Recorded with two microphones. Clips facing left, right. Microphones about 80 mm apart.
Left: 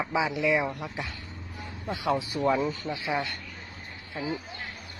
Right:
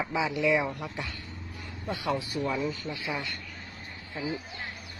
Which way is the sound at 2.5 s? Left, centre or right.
Left.